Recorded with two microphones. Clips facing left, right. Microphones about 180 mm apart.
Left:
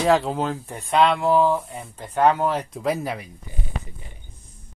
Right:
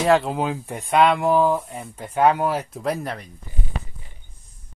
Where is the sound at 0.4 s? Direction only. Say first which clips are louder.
Right 1 dB; 15° right (ahead or behind).